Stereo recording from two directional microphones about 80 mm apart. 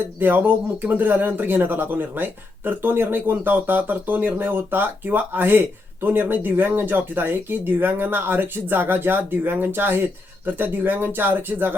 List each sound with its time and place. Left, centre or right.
0.2 s speech: right